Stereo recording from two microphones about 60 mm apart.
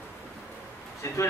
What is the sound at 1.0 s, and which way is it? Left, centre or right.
Speech, left.